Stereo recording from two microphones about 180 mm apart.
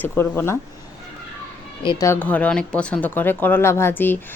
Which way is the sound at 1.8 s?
25° left (ahead or behind).